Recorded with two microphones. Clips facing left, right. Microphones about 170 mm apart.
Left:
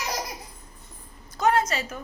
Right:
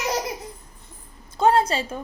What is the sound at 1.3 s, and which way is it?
Speech, 30° right (ahead or behind).